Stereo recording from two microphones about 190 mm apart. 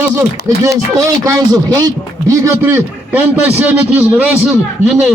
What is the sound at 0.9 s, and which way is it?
A man's voice, 15° right (ahead or behind).